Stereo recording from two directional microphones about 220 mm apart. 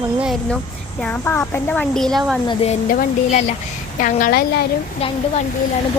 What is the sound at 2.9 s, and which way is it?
A woman's voice, 40° left (ahead or behind).